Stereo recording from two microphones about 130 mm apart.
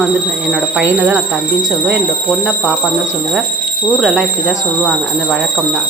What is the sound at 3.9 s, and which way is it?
Speech, 5° right (ahead or behind).